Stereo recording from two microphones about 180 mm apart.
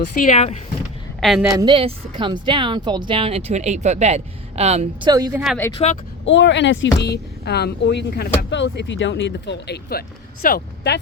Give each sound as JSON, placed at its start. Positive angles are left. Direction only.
{"t": 0.0, "sound": "speech", "side_deg": 45}
{"t": 1.2, "sound": "a woman's voice", "side_deg": 0}
{"t": 1.5, "sound": "speech", "side_deg": -25}
{"t": 5.0, "sound": "speech", "side_deg": -20}
{"t": 5.7, "sound": "speech", "side_deg": 40}
{"t": 6.2, "sound": "speech", "side_deg": 90}